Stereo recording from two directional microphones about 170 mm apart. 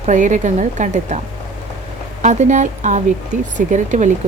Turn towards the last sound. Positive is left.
turn(degrees=-45)  # may be behind; listen again after turning